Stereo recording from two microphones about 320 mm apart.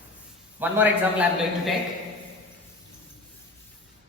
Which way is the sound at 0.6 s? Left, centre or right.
Centre.